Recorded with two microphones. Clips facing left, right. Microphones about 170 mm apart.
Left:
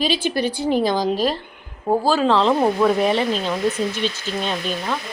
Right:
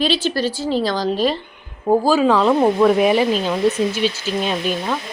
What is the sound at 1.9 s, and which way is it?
A woman's voice, 5° right (ahead or behind).